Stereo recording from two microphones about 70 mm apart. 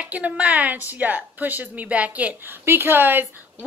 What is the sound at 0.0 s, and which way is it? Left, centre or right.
A woman's voice, centre.